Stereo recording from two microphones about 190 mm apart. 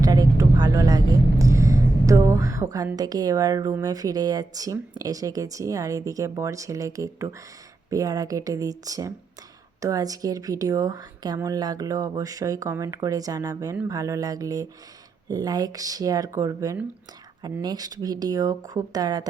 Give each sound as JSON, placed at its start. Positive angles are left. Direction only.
{"t": 0.0, "sound": "speech", "side_deg": -20}
{"t": 13.8, "sound": "mantra", "side_deg": -15}
{"t": 15.3, "sound": "speech", "side_deg": -20}